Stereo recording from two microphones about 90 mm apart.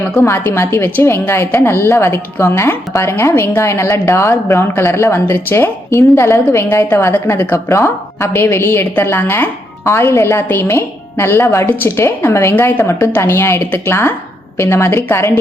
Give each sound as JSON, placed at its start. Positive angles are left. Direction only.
{"t": 0.0, "sound": "a woman's voice", "side_deg": 25}